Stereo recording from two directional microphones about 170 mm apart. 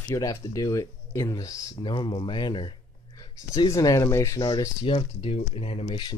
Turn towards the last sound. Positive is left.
turn(degrees=30)  # may be behind; listen again after turning